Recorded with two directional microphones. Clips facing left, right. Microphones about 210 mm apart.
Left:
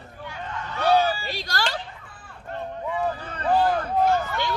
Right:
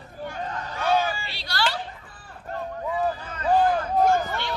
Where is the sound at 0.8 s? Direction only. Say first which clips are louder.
Left 3 dB; 35° left (ahead or behind).